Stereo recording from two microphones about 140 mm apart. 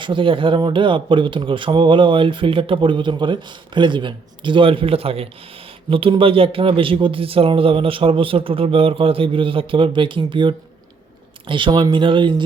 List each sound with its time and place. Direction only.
0.0 s speech: 35° right (ahead or behind)